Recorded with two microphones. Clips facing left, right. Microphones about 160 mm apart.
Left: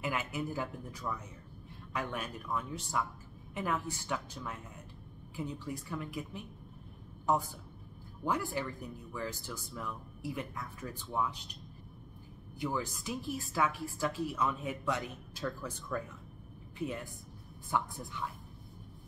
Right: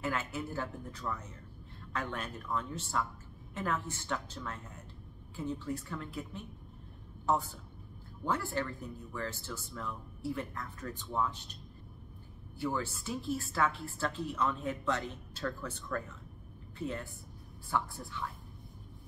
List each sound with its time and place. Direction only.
0.0 s a woman's voice: 15° left (ahead or behind)
12.5 s a woman's voice: 15° left (ahead or behind)